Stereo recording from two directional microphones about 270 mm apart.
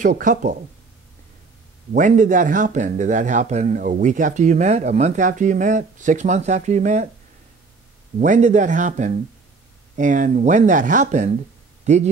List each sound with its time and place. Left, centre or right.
0.0 s speech: right
2.0 s speech: right
8.2 s speech: right